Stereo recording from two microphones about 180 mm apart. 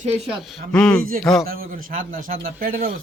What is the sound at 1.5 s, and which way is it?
A man's voice, 50° right (ahead or behind).